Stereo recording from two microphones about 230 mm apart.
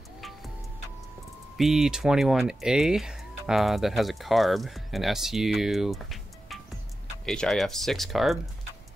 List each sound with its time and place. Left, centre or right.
1.6 s speech: centre